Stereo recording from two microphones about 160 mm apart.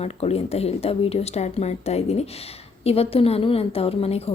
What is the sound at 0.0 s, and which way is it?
Speech, 40° left (ahead or behind).